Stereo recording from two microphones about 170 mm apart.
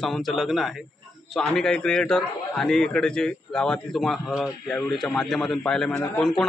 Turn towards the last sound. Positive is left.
turn(degrees=5)  # may be behind; listen again after turning